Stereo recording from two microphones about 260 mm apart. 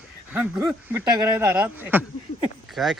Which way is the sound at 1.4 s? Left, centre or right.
Centre.